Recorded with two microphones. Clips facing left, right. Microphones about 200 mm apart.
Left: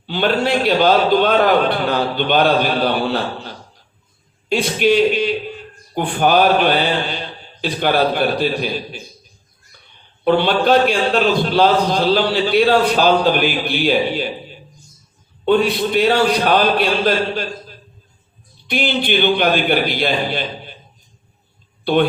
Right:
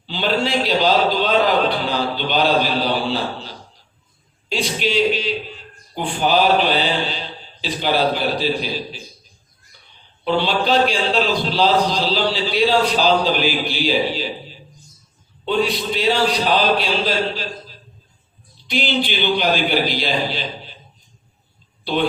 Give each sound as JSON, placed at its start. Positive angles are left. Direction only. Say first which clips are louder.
{"t": 0.0, "sound": "a man's voice", "louder": "left 3 dB", "side_deg": 55}
{"t": 10.2, "sound": "a man's voice", "louder": "left 5 dB", "side_deg": 55}